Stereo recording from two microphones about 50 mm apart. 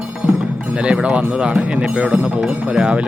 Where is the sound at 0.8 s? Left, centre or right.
Centre.